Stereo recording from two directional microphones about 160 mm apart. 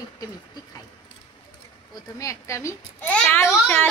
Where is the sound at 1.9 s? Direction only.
20° left (ahead or behind).